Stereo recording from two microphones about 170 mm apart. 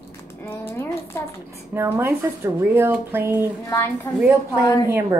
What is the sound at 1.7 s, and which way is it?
Speech, 15° right (ahead or behind).